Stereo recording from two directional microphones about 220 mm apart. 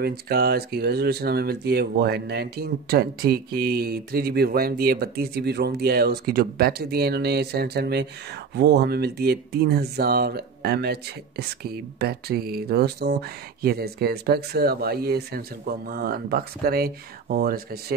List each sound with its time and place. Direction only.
0.0 s speech: 45° right (ahead or behind)